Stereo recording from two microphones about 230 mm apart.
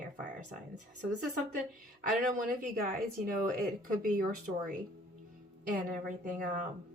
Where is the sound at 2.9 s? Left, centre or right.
Right.